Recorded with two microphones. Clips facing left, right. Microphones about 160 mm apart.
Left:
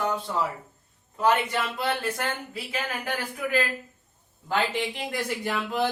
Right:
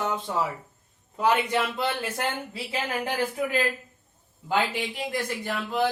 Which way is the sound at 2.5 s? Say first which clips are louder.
Right 2 dB; 30° right (ahead or behind).